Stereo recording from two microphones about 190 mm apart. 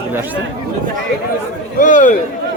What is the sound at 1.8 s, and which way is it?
Speech, 45° left (ahead or behind).